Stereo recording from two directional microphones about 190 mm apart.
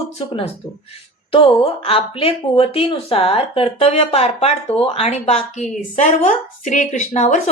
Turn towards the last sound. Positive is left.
turn(degrees=40)  # may be behind; listen again after turning